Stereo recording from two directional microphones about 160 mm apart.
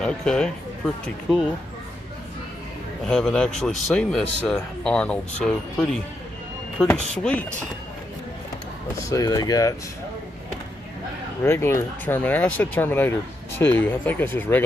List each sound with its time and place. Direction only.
0.0 s speech: 5° left (ahead or behind)
3.0 s speech: 5° left (ahead or behind)
9.0 s speech: 20° left (ahead or behind)
11.4 s speech: 15° left (ahead or behind)